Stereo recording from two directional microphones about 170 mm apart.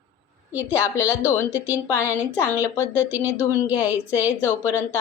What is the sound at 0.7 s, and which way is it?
Speech, 15° left (ahead or behind).